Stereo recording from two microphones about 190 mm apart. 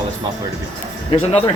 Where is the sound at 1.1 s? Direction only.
30° left (ahead or behind).